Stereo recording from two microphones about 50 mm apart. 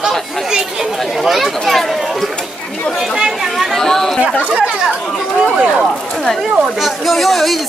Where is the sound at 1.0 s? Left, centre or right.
Centre.